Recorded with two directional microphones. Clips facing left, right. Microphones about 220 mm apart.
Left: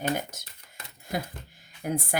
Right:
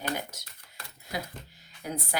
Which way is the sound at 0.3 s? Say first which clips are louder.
Left 2 dB; 50° left (ahead or behind).